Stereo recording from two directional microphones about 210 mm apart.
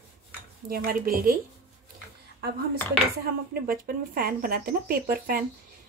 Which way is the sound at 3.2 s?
45° right (ahead or behind).